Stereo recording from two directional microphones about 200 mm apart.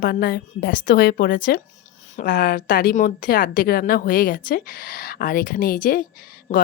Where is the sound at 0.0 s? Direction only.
50° left (ahead or behind).